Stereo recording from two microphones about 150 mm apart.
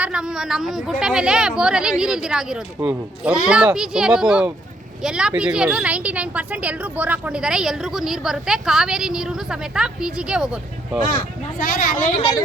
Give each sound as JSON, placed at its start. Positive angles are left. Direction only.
{"t": 0.0, "sound": "speech", "side_deg": -5}
{"t": 11.6, "sound": "a woman's voice", "side_deg": 65}